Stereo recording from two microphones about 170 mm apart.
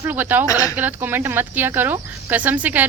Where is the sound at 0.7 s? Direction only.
10° right (ahead or behind).